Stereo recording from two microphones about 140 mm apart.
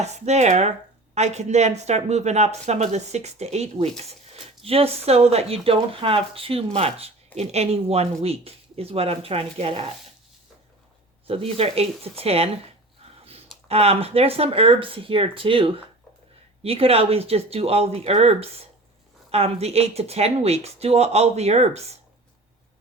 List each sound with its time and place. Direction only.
0.0 s speech: 55° right (ahead or behind)
11.3 s speech: 45° right (ahead or behind)
13.7 s speech: 45° right (ahead or behind)